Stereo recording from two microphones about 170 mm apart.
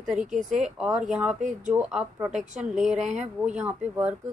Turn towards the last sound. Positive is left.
turn(degrees=-5)  # may be behind; listen again after turning